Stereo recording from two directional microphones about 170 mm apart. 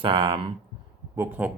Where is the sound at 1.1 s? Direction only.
15° right (ahead or behind).